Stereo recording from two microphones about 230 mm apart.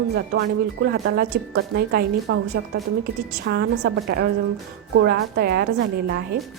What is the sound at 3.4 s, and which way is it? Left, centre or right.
Speech, right.